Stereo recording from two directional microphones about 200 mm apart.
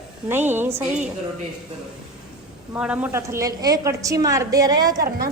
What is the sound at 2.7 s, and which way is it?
A woman's voice, 5° right (ahead or behind).